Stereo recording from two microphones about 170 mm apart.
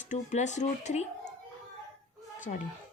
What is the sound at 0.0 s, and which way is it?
A woman's voice, 45° left (ahead or behind).